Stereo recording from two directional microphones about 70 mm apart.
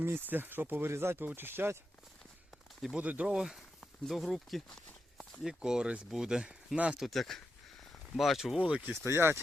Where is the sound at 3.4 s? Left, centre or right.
Centre.